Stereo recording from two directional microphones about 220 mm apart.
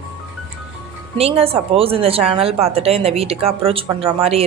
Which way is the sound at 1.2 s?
25° right (ahead or behind).